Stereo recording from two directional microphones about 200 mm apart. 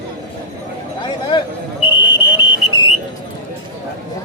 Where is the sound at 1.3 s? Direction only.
20° left (ahead or behind).